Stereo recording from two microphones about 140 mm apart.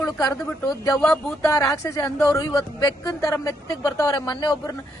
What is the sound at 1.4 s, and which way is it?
Speech, 25° left (ahead or behind).